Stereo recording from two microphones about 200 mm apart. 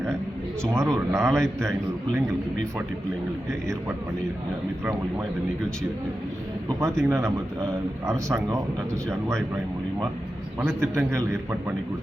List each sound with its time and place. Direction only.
0.7 s speech: 15° right (ahead or behind)
1.2 s a man's voice: 5° left (ahead or behind)
6.7 s speech: 15° right (ahead or behind)
10.6 s speech: 10° right (ahead or behind)